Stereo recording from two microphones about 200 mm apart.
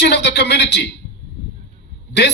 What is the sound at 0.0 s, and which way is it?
Speech, 60° left (ahead or behind).